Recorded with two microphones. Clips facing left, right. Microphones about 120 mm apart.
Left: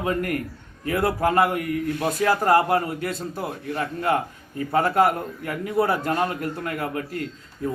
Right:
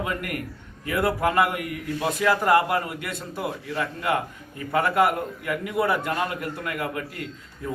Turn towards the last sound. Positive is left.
turn(degrees=35)  # may be behind; listen again after turning